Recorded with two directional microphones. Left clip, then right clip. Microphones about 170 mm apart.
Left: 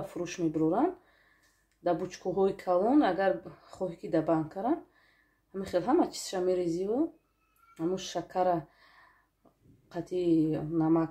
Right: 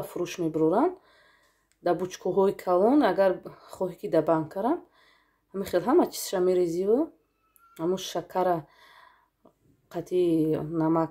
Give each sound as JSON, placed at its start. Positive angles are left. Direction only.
{"t": 0.0, "sound": "speech", "side_deg": -40}